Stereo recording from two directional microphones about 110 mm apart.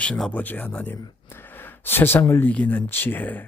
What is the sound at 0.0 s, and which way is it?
Speech, 10° left (ahead or behind).